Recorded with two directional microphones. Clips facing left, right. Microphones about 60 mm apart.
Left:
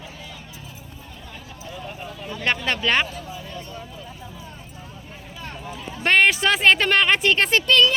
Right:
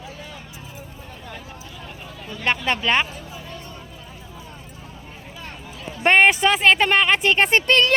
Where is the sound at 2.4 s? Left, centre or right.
Centre.